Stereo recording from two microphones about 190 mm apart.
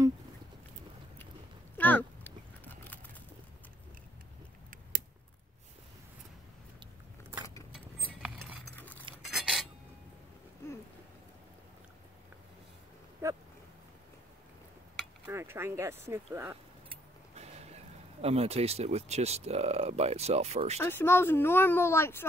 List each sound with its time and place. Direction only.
1.8 s a sound: 10° left (ahead or behind)
8.2 s chink: centre (ahead or behind)
8.7 s chink: 10° left (ahead or behind)
9.2 s cutlery: centre (ahead or behind)
13.2 s dog: 15° right (ahead or behind)
15.2 s a sound: 15° right (ahead or behind)
16.9 s speech: 35° right (ahead or behind)
20.8 s speech: 10° left (ahead or behind)